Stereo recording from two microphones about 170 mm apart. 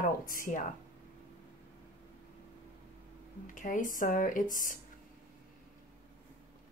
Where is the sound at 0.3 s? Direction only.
50° left (ahead or behind).